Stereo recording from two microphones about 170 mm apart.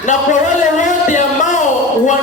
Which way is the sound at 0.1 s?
45° left (ahead or behind).